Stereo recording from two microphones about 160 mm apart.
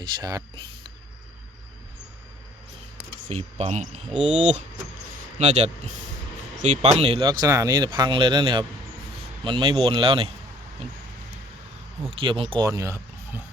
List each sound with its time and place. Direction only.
0.2 s speech: 20° right (ahead or behind)
3.2 s speech: 45° right (ahead or behind)
6.6 s a man's voice: 40° right (ahead or behind)
12.0 s a man's voice: 35° right (ahead or behind)
12.6 s speech: 20° right (ahead or behind)